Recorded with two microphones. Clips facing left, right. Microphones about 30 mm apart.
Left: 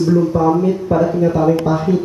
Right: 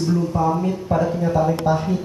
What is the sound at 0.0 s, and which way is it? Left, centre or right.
A man's voice, left.